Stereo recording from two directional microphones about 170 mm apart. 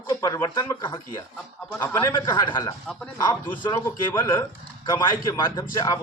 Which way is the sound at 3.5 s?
30° left (ahead or behind).